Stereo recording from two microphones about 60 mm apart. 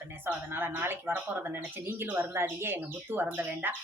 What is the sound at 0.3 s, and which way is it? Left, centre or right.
Speech, right.